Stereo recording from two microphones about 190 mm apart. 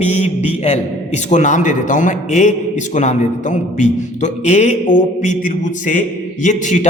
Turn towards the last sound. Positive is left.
turn(degrees=40)  # may be behind; listen again after turning